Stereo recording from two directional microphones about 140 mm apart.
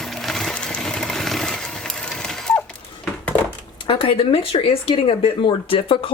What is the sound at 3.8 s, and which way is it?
Speech, 40° left (ahead or behind).